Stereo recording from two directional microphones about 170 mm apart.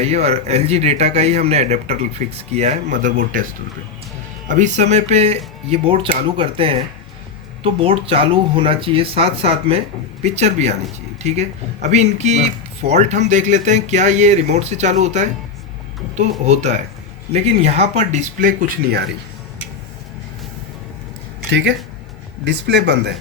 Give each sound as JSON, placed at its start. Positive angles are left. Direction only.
{"t": 0.0, "sound": "speech", "side_deg": -40}
{"t": 4.4, "sound": "speech", "side_deg": -45}
{"t": 16.5, "sound": "speech", "side_deg": -40}
{"t": 21.5, "sound": "speech", "side_deg": -90}